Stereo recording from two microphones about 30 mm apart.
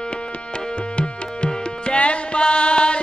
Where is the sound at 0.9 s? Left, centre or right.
Left.